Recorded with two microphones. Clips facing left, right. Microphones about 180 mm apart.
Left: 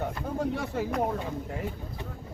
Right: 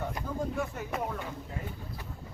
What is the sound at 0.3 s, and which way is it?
Speech, 85° left.